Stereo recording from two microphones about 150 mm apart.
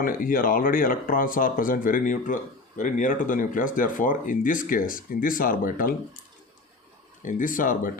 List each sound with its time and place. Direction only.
0.0 s speech: 65° left (ahead or behind)
7.2 s speech: 60° left (ahead or behind)